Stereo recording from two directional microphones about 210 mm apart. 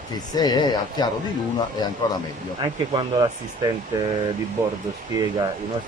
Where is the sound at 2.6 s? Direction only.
20° right (ahead or behind).